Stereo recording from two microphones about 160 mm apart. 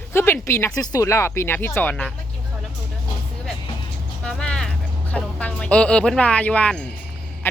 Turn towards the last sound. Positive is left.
turn(degrees=15)  # may be behind; listen again after turning